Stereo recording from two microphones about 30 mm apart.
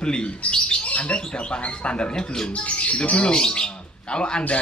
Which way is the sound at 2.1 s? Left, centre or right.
Left.